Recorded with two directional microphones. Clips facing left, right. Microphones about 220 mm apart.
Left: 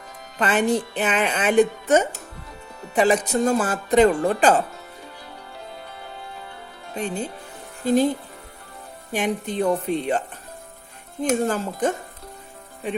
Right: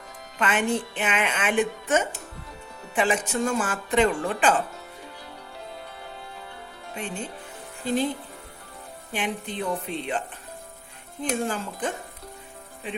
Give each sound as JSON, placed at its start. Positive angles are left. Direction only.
{"t": 0.3, "sound": "a woman's voice", "side_deg": 35}
{"t": 6.9, "sound": "a woman's voice", "side_deg": 35}
{"t": 9.1, "sound": "speech", "side_deg": 45}
{"t": 11.2, "sound": "speech", "side_deg": 45}